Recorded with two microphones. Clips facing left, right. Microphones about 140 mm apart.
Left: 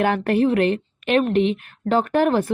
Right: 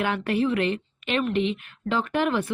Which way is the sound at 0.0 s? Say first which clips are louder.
Left 6 dB; 45° left (ahead or behind).